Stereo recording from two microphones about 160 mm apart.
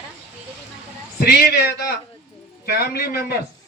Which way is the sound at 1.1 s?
80° left.